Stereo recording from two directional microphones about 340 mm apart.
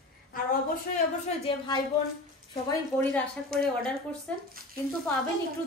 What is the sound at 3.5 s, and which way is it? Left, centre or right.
Speech, right.